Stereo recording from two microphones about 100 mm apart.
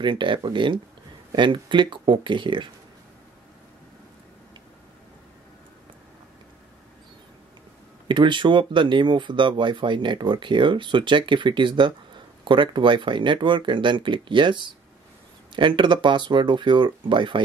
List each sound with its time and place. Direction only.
0.0 s speech: 55° right (ahead or behind)
8.1 s speech: 55° right (ahead or behind)